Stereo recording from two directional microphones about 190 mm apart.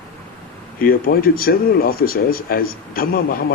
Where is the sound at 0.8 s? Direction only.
50° left (ahead or behind).